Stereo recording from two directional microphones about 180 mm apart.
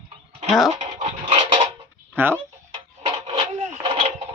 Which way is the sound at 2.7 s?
30° right (ahead or behind).